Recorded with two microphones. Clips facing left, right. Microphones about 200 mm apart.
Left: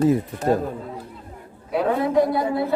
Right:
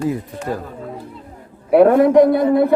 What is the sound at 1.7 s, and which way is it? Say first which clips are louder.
Speech: right 10 dB; 65° right (ahead or behind).